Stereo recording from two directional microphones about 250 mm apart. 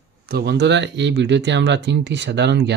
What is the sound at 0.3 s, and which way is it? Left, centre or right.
Speech, right.